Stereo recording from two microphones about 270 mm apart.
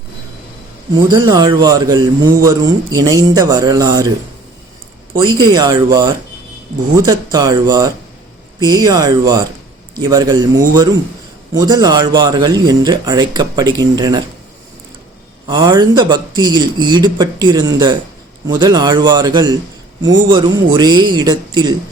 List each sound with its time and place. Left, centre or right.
0.9 s a man's voice: centre
5.1 s a man's voice: centre
15.4 s a man's voice: centre